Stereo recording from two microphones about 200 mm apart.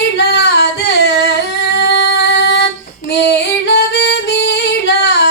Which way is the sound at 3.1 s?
60° left (ahead or behind).